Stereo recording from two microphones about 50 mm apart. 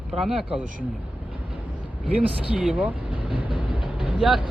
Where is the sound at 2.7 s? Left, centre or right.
Right.